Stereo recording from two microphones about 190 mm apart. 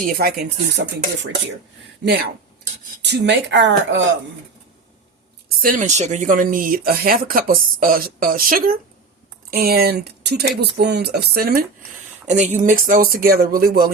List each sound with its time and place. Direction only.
0.0 s speech: 55° right (ahead or behind)
2.0 s speech: 60° right (ahead or behind)
5.6 s speech: 40° right (ahead or behind)
12.3 s speech: 40° right (ahead or behind)